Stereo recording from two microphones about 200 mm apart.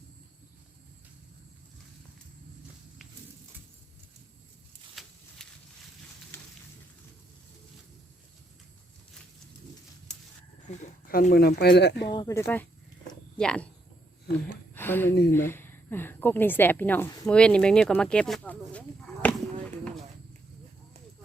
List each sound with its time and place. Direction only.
5.4 s a sound: centre (ahead or behind)
10.7 s speech: 40° left (ahead or behind)
12.1 s speech: 15° left (ahead or behind)
14.8 s a woman's voice: 10° left (ahead or behind)